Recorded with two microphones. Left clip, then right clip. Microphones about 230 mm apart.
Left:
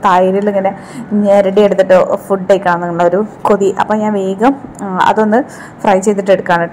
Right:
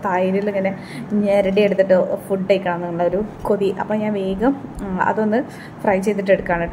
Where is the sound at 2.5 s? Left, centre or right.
Centre.